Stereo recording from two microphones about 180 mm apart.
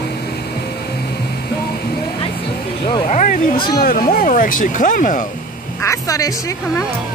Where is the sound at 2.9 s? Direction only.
30° left (ahead or behind).